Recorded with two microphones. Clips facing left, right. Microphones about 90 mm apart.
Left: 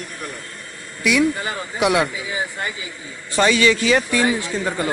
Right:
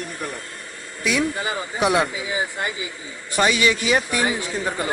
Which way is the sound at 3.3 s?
20° right (ahead or behind).